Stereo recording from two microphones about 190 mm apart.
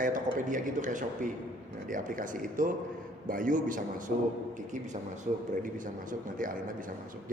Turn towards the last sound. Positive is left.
turn(degrees=-45)  # may be behind; listen again after turning